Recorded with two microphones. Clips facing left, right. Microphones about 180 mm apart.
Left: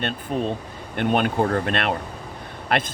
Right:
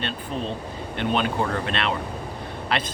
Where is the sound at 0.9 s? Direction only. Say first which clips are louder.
Left 3 dB; 50° left (ahead or behind).